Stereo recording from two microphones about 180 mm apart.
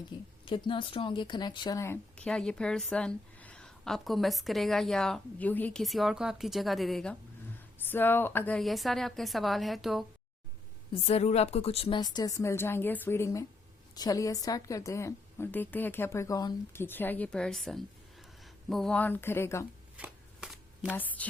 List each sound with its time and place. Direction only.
0.1 s a woman's voice: 25° left (ahead or behind); by 10.1 s centre (ahead or behind)
11.0 s a woman's voice: 35° left (ahead or behind); by 19.6 s 15° left (ahead or behind)
20.0 s shuffling cards: 5° right (ahead or behind)
20.9 s a woman's voice: 10° left (ahead or behind)